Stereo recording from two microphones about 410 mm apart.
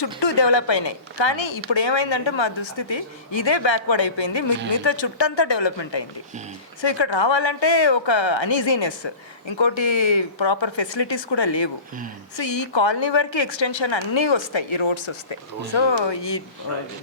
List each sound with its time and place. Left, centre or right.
0.0 s speech: left
10.2 s speech: left